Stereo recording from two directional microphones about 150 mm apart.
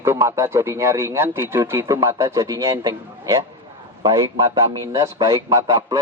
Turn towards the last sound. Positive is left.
turn(degrees=-25)  # may be behind; listen again after turning